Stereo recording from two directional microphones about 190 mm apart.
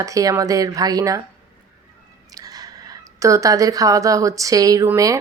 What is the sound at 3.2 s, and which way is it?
Speech, 15° right (ahead or behind).